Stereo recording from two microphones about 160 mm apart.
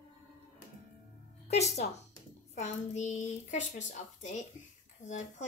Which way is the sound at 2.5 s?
45° left (ahead or behind).